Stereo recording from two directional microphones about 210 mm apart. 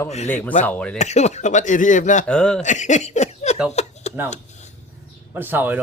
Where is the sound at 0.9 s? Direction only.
30° left (ahead or behind).